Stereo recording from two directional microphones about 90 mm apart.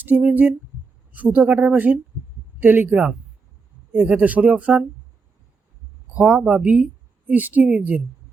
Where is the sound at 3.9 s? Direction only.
15° right (ahead or behind).